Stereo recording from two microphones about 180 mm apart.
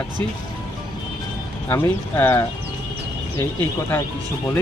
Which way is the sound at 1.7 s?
10° left (ahead or behind).